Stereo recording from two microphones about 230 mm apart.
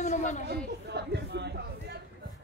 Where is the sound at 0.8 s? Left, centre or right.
Right.